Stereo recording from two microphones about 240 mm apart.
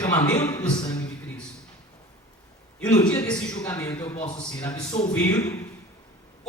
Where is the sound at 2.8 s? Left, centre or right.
Centre.